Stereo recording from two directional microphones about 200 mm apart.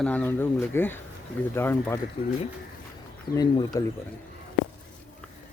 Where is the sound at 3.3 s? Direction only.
20° left (ahead or behind).